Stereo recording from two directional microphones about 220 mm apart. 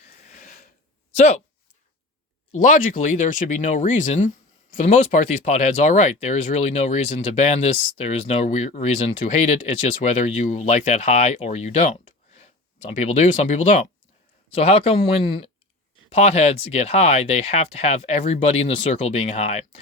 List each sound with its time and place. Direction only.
0.3 s a sound: 35° left (ahead or behind)
1.1 s speech: 30° left (ahead or behind)
2.5 s speech: 35° left (ahead or behind)